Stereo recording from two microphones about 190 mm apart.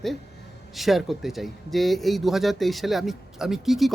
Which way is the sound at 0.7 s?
Centre (ahead or behind).